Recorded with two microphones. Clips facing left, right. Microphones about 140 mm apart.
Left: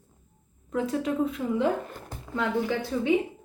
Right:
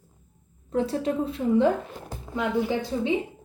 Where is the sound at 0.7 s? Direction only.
30° right (ahead or behind).